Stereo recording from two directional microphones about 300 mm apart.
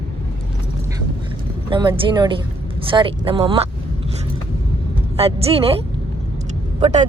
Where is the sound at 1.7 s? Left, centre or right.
Centre.